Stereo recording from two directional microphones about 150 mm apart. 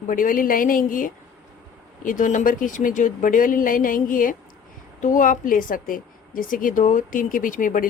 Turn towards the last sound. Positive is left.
turn(degrees=60)  # may be behind; listen again after turning